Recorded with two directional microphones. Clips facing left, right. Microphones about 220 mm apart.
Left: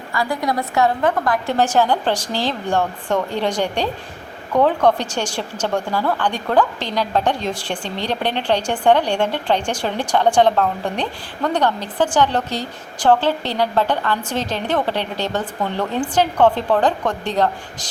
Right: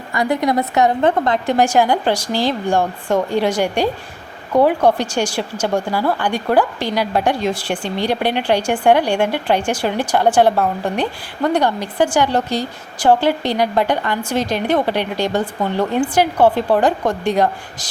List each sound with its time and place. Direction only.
0.1 s a woman's voice: 20° right (ahead or behind)
1.5 s speech: 10° right (ahead or behind)